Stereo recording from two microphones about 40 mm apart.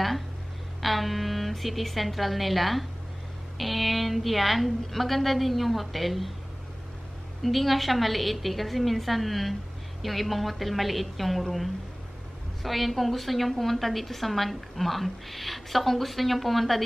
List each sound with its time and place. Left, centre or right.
0.8 s a woman's voice: centre
7.4 s a woman's voice: centre